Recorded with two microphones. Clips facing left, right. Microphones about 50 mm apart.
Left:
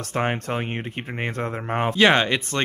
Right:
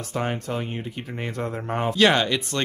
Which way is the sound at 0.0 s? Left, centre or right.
Left.